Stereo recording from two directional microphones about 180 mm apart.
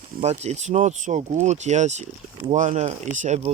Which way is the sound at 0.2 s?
40° right (ahead or behind).